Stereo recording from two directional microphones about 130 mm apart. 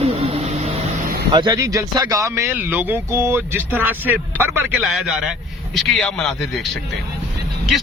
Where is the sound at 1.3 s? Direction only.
35° right (ahead or behind); by 4.8 s 15° right (ahead or behind).